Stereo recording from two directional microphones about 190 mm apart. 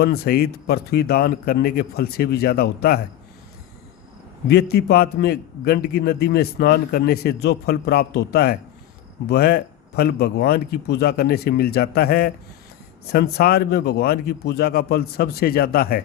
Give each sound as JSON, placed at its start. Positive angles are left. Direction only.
{"t": 0.0, "sound": "a man's voice", "side_deg": 55}
{"t": 4.4, "sound": "a man's voice", "side_deg": 60}